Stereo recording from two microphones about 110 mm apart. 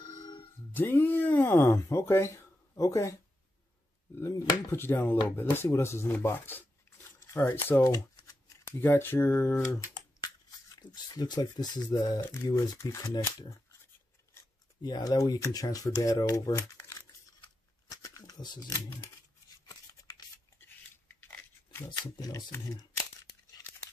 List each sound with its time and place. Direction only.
0.7 s speech: 20° left (ahead or behind)
4.7 s speech: 20° left (ahead or behind)
7.8 s shuffling cards: 35° left (ahead or behind)
8.6 s speech: 20° left (ahead or behind)
10.9 s speech: 40° left (ahead or behind)
12.2 s speech: 25° left (ahead or behind)
14.8 s speech: 35° left (ahead or behind)
17.8 s a sound: 30° left (ahead or behind)
19.7 s a sound: 35° left (ahead or behind)
20.6 s a sound: 20° left (ahead or behind)
21.8 s speech: 40° left (ahead or behind)